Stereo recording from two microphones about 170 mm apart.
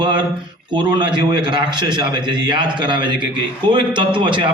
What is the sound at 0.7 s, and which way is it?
A man's voice, 25° right (ahead or behind).